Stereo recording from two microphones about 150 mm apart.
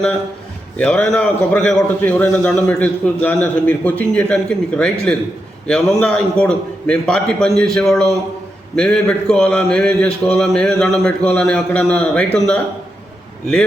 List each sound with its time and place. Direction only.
0.8 s a man's voice: 5° left (ahead or behind)